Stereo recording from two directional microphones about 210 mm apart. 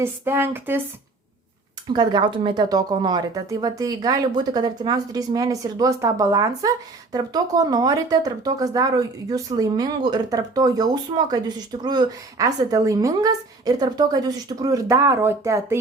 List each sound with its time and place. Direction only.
0.0 s a woman's voice: 10° right (ahead or behind)
1.9 s a woman's voice: 20° right (ahead or behind)